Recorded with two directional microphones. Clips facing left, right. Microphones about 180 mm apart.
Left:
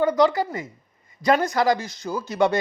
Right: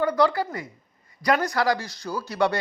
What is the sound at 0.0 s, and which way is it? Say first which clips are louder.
Speech: left 3 dB; 20° left (ahead or behind).